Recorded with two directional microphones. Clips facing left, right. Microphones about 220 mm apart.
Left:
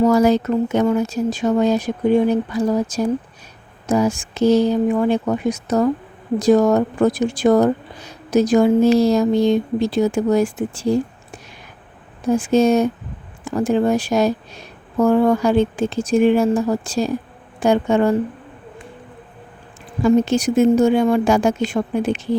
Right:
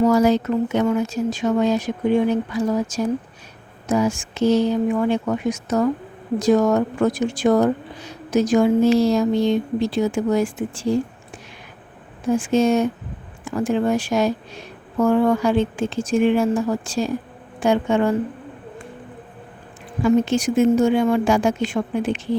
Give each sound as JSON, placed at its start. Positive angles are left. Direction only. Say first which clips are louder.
{"t": 0.1, "sound": "speech", "louder": "left 2 dB", "side_deg": 40}
{"t": 12.4, "sound": "speech", "louder": "left 3 dB", "side_deg": 40}
{"t": 20.0, "sound": "speech", "louder": "left 2 dB", "side_deg": 40}